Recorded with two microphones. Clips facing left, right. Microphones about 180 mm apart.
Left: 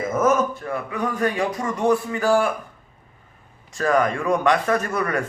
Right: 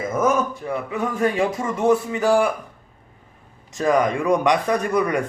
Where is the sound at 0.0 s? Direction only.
10° right (ahead or behind).